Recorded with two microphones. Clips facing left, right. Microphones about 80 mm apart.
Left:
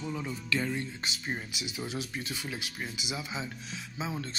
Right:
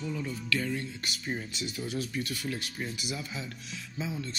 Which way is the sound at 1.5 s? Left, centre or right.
Centre.